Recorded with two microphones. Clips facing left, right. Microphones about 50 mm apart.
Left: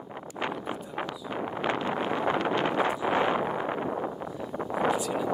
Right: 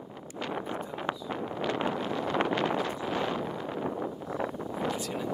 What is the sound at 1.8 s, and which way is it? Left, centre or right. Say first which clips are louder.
Vehicle: left 3 dB; left.